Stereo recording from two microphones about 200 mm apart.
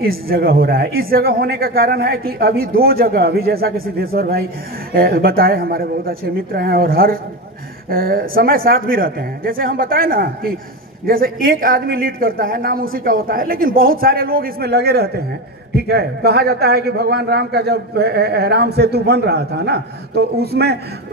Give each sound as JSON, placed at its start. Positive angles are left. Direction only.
{"t": 0.0, "sound": "a man's voice", "side_deg": -45}